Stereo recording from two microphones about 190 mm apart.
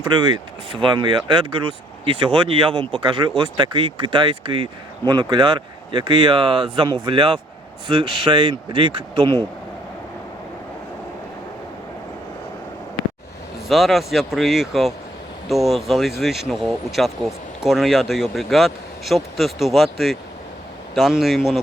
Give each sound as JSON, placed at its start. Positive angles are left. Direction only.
{"t": 0.0, "sound": "speech", "side_deg": -20}
{"t": 13.7, "sound": "speech", "side_deg": 0}